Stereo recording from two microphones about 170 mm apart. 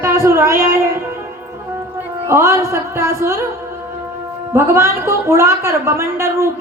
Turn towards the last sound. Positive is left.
turn(degrees=-15)  # may be behind; listen again after turning